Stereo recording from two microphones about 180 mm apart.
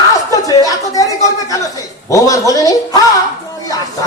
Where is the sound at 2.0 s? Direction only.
20° left (ahead or behind).